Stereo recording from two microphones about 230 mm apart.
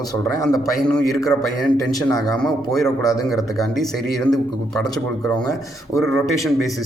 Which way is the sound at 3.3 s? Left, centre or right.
Centre.